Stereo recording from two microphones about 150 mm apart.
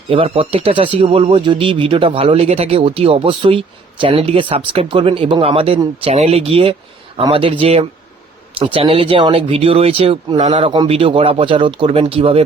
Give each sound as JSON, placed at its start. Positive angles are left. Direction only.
{"t": 0.1, "sound": "speech", "side_deg": -35}